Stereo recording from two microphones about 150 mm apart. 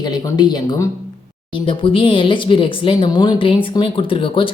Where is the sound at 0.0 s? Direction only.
30° left (ahead or behind).